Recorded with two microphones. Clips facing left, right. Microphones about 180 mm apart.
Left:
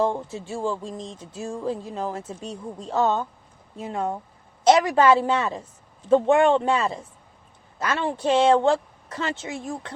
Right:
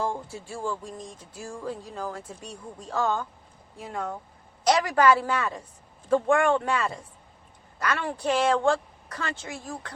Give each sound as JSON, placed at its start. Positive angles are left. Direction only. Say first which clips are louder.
{"t": 0.0, "sound": "speech", "louder": "left 6 dB", "side_deg": 20}